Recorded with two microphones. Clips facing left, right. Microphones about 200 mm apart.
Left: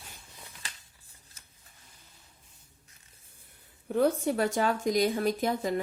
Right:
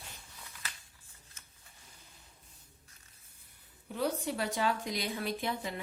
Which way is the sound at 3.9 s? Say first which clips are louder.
Left 8 dB; 50° left (ahead or behind).